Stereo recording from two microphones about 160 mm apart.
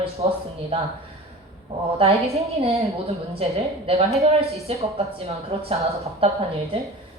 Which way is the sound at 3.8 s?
40° right (ahead or behind).